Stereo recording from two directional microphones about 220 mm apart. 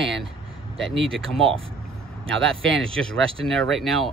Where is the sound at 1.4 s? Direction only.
25° right (ahead or behind).